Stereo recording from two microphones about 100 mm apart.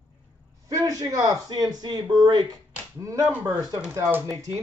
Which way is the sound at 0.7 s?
35° right (ahead or behind).